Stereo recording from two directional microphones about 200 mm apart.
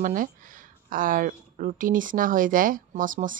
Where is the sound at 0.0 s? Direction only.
40° right (ahead or behind).